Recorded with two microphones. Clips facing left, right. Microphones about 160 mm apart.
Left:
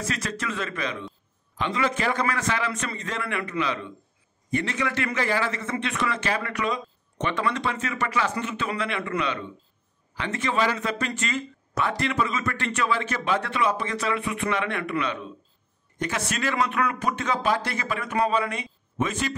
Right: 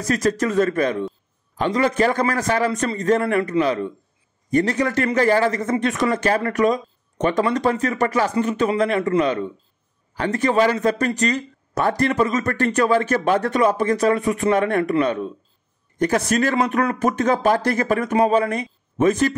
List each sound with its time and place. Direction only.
0.0 s a man's voice: 40° right (ahead or behind)